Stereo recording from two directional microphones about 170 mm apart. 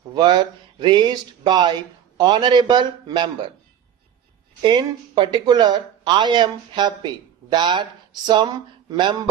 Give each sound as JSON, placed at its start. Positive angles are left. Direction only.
{"t": 0.1, "sound": "speech", "side_deg": -25}
{"t": 4.6, "sound": "speech", "side_deg": -25}